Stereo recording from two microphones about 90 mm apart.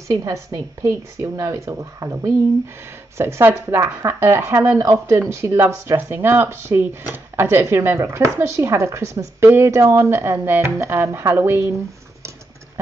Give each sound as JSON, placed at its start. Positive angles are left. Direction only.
{"t": 0.1, "sound": "a woman's voice", "side_deg": -35}